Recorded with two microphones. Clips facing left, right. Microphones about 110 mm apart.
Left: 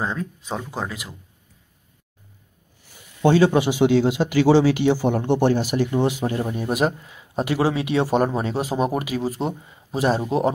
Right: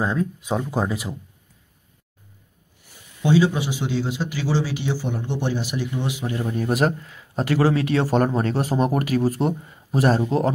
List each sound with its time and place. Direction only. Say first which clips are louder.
0.0 s speech: right 3 dB; 5° right (ahead or behind)
0.7 s speech: right 5 dB; 20° right (ahead or behind)
3.2 s speech: left 3 dB; 55° left (ahead or behind)
6.5 s speech: right 1 dB; 10° left (ahead or behind)
10.2 s speech: even; 15° left (ahead or behind)